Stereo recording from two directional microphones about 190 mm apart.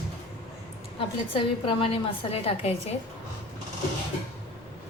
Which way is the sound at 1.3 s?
25° left (ahead or behind).